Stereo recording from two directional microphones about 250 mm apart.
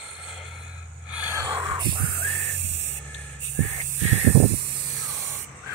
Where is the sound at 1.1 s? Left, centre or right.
Centre.